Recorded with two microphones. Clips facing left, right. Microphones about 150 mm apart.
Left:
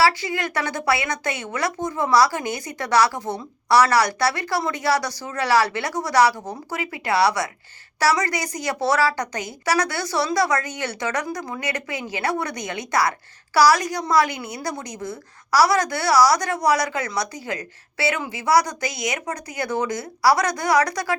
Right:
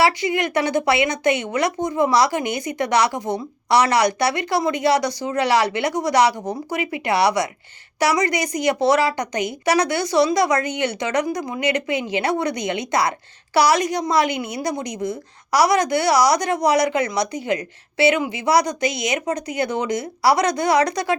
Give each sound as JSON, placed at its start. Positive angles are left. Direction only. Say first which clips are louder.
{"t": 0.0, "sound": "speech", "louder": "right 2 dB", "side_deg": -20}